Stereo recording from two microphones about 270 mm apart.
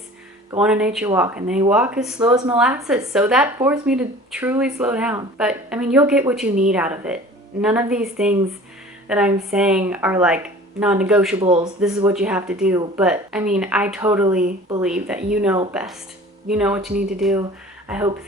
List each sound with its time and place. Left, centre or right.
0.6 s speech: centre
9.0 s speech: centre
11.3 s speech: centre
11.8 s speech: centre